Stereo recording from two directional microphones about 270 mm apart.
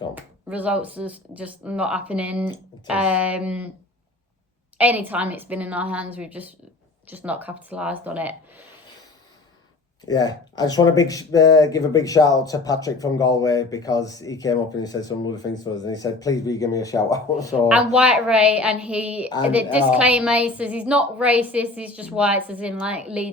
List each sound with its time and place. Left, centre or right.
0.1 s a woman's voice: centre
4.8 s a woman's voice: centre
10.1 s speech: centre
17.7 s a woman's voice: centre